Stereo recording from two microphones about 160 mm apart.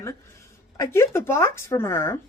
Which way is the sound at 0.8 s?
15° left (ahead or behind).